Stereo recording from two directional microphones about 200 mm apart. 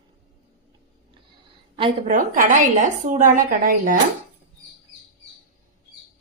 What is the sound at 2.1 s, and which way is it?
A woman's voice, 40° right (ahead or behind).